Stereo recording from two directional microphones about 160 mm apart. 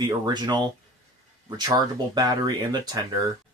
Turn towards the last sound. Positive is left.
turn(degrees=-25)  # may be behind; listen again after turning